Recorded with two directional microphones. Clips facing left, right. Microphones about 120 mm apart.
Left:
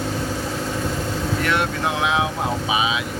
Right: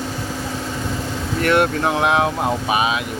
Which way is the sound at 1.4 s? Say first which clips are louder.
Right 7 dB; 50° right (ahead or behind).